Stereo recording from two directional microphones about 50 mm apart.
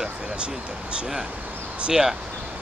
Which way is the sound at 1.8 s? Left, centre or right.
Centre.